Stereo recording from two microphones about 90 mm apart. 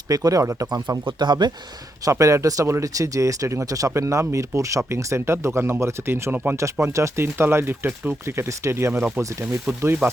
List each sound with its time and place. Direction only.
0.1 s speech: 40° right (ahead or behind)
0.9 s speech: 55° right (ahead or behind)
2.0 s speech: 35° right (ahead or behind)
9.0 s speech: 20° right (ahead or behind)